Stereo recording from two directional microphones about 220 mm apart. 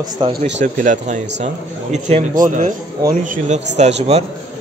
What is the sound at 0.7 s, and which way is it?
A man's voice, 35° right (ahead or behind).